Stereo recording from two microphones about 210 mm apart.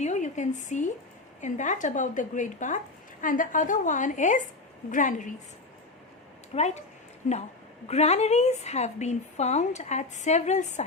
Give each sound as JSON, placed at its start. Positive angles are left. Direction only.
{"t": 0.0, "sound": "a sound", "side_deg": 35}
{"t": 1.4, "sound": "speech", "side_deg": 35}
{"t": 6.5, "sound": "speech", "side_deg": 30}